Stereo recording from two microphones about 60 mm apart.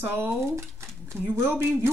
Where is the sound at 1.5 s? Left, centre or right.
Right.